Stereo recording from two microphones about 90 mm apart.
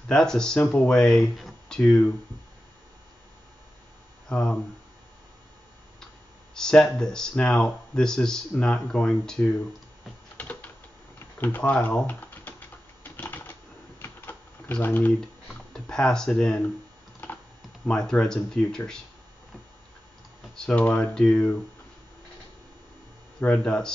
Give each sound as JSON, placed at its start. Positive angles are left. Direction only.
{"t": 0.1, "sound": "speech", "side_deg": 5}
{"t": 4.3, "sound": "speech", "side_deg": 10}
{"t": 6.5, "sound": "speech", "side_deg": 10}
{"t": 10.3, "sound": "typing", "side_deg": 15}
{"t": 11.1, "sound": "speech", "side_deg": 20}
{"t": 12.1, "sound": "typing", "side_deg": 20}
{"t": 14.7, "sound": "speech", "side_deg": 20}
{"t": 15.1, "sound": "speech", "side_deg": 5}
{"t": 17.8, "sound": "speech", "side_deg": 10}
{"t": 20.5, "sound": "speech", "side_deg": 10}
{"t": 23.4, "sound": "speech", "side_deg": 10}